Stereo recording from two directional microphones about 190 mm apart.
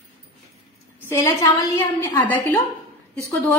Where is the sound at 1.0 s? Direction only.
15° left (ahead or behind).